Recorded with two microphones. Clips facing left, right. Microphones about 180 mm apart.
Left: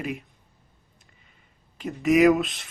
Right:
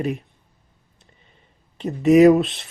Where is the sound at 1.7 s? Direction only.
35° right (ahead or behind).